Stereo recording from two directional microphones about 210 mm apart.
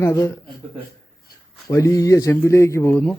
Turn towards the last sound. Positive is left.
turn(degrees=5)  # may be behind; listen again after turning